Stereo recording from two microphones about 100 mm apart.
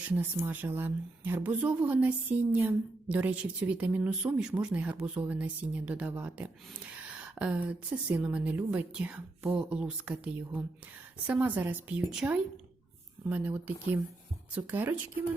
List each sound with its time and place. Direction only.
0.3 s a woman's voice: 20° right (ahead or behind)